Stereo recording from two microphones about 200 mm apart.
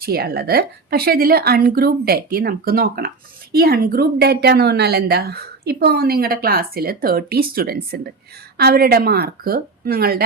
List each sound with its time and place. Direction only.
0.0 s a woman's voice: 50° right (ahead or behind)